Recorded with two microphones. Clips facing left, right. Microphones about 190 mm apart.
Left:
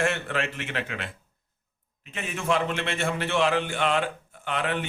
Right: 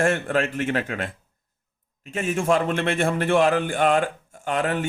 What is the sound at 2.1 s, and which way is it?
A man's voice, 45° right (ahead or behind).